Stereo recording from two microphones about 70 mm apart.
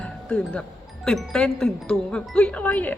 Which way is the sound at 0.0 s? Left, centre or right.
Centre.